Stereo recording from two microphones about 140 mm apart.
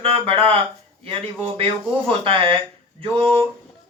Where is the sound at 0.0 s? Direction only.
40° right (ahead or behind).